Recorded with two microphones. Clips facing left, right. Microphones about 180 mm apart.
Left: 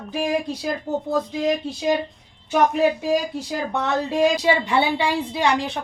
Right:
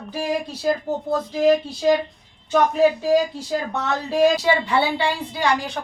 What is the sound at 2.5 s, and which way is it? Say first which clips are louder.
Speech: right 1 dB; 15° left (ahead or behind).